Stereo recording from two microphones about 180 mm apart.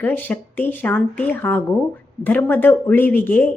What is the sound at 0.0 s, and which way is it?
Speech, 10° left (ahead or behind).